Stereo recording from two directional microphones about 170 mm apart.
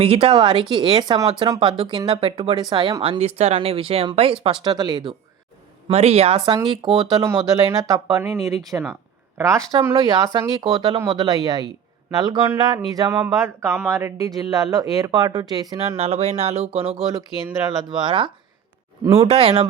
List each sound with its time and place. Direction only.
0.0 s speech: 35° right (ahead or behind)
5.9 s speech: 40° right (ahead or behind); by 9.6 s 15° right (ahead or behind)
9.9 s speech: 30° right (ahead or behind)
16.0 s speech: 40° right (ahead or behind)
19.3 s speech: 35° right (ahead or behind)